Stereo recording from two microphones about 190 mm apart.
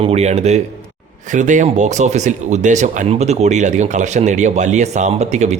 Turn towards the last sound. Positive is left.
turn(degrees=-35)  # may be behind; listen again after turning